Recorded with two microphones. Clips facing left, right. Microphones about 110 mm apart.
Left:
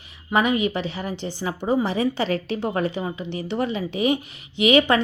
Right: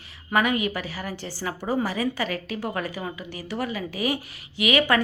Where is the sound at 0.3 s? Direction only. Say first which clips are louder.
Left 3 dB; 25° left (ahead or behind).